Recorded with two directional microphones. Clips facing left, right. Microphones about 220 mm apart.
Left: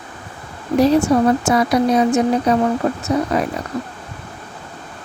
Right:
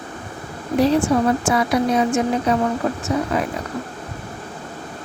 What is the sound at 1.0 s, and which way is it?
Speech, 40° left (ahead or behind).